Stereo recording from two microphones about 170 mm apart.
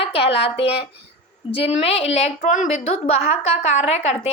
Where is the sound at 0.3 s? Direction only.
35° left (ahead or behind).